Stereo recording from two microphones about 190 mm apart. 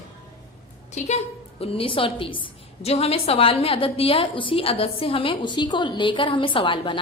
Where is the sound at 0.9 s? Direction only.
35° left (ahead or behind).